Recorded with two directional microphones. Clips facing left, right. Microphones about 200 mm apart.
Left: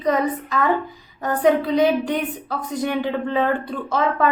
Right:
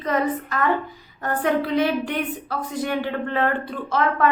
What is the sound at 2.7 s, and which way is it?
Speech, 15° left (ahead or behind).